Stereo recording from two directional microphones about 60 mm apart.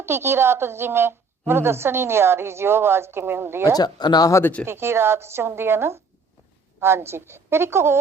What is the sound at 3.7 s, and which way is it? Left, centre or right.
Speech, left.